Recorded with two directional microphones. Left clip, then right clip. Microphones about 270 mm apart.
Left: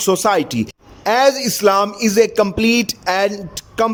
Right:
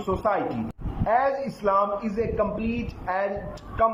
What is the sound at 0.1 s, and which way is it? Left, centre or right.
Speech, left.